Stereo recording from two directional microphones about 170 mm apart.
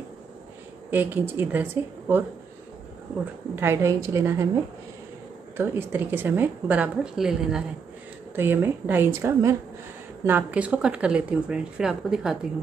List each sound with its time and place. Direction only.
0.8 s speech: 10° right (ahead or behind)
3.5 s speech: 15° right (ahead or behind)
5.6 s speech: 10° right (ahead or behind)